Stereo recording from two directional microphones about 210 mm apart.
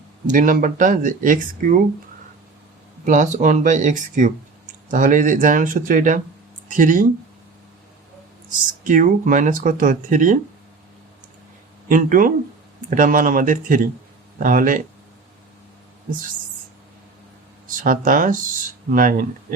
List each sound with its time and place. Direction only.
0.3 s speech: 40° right (ahead or behind)
3.1 s speech: 35° right (ahead or behind)
8.5 s speech: 40° right (ahead or behind)
11.9 s speech: 40° right (ahead or behind)
17.7 s speech: 40° right (ahead or behind)